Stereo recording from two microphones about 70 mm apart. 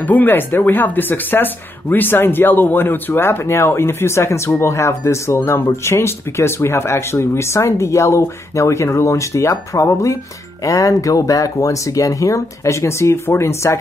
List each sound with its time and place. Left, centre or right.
0.0 s speech: left